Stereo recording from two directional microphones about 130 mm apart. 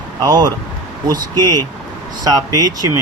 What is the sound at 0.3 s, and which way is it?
Speech, 30° right (ahead or behind).